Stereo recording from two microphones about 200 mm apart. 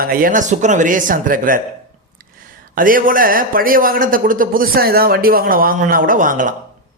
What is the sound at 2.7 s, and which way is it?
Speech, 45° right (ahead or behind).